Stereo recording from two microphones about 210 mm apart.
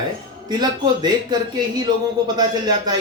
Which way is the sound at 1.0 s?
20° right (ahead or behind).